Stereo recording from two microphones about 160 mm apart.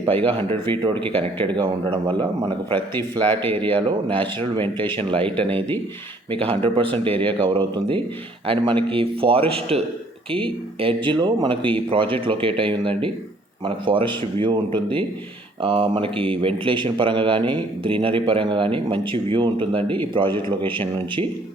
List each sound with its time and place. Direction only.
0.1 s a man's voice: 35° right (ahead or behind)
3.6 s a man's voice: 30° right (ahead or behind)
5.5 s speech: 10° left (ahead or behind)
6.3 s a man's voice: 35° right (ahead or behind)